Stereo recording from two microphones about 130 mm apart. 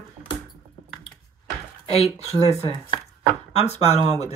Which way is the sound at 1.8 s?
50° left (ahead or behind).